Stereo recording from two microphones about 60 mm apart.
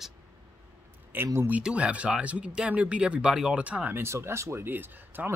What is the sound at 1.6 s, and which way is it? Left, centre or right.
A man's voice, centre.